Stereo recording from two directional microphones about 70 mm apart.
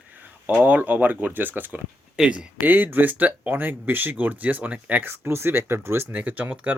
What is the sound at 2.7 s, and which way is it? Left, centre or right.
Speech, right.